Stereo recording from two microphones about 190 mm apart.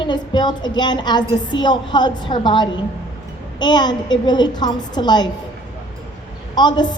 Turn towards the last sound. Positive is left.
turn(degrees=25)  # may be behind; listen again after turning